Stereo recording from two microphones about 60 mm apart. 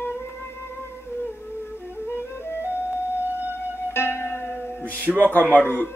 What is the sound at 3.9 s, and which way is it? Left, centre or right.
Music, left.